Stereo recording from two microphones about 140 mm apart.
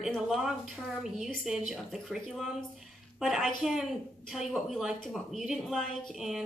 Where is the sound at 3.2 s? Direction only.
Centre (ahead or behind).